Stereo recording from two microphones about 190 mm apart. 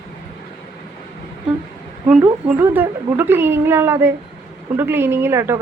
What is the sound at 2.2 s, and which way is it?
A woman's voice, 10° right (ahead or behind).